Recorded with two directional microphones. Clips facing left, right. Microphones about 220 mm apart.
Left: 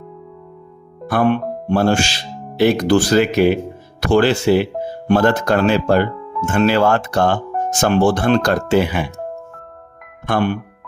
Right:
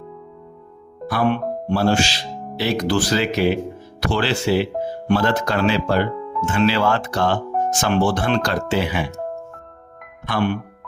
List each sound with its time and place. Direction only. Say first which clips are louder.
1.0 s speech: left 4 dB; 50° left (ahead or behind)
10.2 s speech: left 3 dB; 50° left (ahead or behind)